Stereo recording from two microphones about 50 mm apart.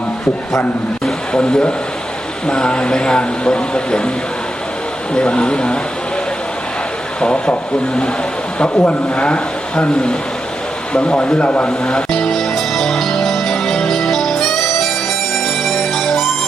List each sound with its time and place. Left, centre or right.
1.3 s speech: left
5.1 s speech: centre
7.2 s speech: centre
8.5 s speech: left
12.2 s music: centre